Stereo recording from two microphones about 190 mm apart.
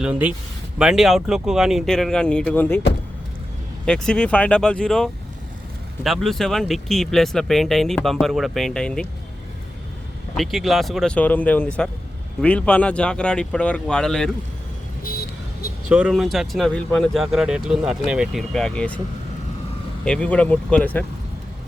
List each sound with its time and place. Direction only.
0.0 s speech: 5° right (ahead or behind); by 2.8 s 10° left (ahead or behind)
3.8 s speech: 5° left (ahead or behind)
10.3 s speech: centre (ahead or behind)
15.0 s vehicle: 50° left (ahead or behind)
15.9 s speech: 5° right (ahead or behind)
20.1 s speech: 5° left (ahead or behind)